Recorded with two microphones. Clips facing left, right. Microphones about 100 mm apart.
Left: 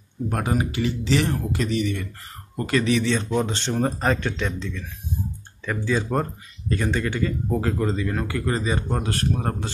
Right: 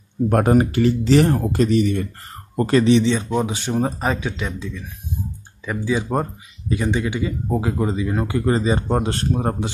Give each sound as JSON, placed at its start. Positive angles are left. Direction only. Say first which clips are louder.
{"t": 0.3, "sound": "speech", "louder": "right 9 dB", "side_deg": -50}
{"t": 3.3, "sound": "speech", "louder": "right 2 dB", "side_deg": -5}